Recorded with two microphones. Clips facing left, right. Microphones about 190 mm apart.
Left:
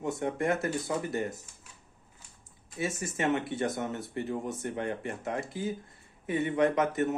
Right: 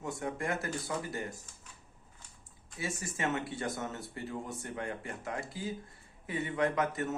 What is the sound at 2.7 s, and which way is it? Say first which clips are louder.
Speech: left 6 dB; 25° left (ahead or behind).